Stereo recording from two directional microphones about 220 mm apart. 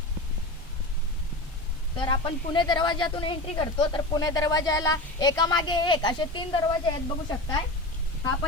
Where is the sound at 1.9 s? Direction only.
20° left (ahead or behind).